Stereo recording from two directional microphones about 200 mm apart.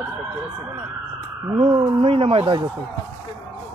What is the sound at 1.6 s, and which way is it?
Speech, 30° right (ahead or behind).